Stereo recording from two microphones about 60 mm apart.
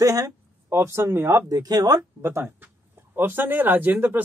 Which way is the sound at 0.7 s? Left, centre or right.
Right.